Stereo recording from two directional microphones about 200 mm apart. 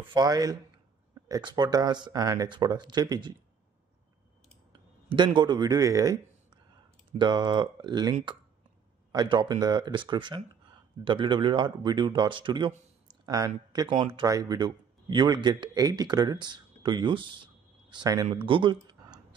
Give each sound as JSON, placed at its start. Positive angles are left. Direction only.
{"t": 0.1, "sound": "speech", "side_deg": -20}
{"t": 5.1, "sound": "a man's voice", "side_deg": -25}